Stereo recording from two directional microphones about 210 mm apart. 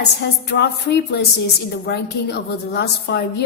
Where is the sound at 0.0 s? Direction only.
55° left (ahead or behind).